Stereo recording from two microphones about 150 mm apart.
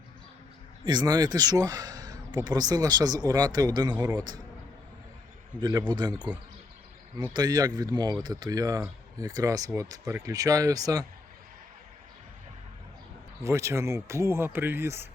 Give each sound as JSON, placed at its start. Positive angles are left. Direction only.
{"t": 0.9, "sound": "speech", "side_deg": -25}
{"t": 5.5, "sound": "speech", "side_deg": -30}
{"t": 13.4, "sound": "speech", "side_deg": -20}